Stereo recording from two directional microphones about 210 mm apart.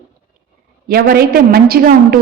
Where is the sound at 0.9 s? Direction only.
45° right (ahead or behind).